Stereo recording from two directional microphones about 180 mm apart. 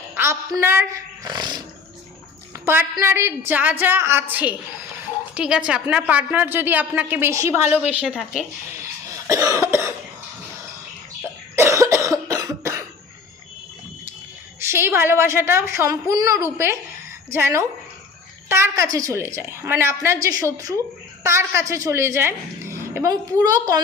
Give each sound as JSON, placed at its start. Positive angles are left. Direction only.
{"t": 0.1, "sound": "a sound", "side_deg": -15}
{"t": 0.6, "sound": "speech", "side_deg": -15}
{"t": 3.0, "sound": "a woman's voice", "side_deg": -15}
{"t": 8.7, "sound": "cough", "side_deg": -15}
{"t": 11.2, "sound": "cough", "side_deg": -15}
{"t": 14.6, "sound": "a woman's voice", "side_deg": -15}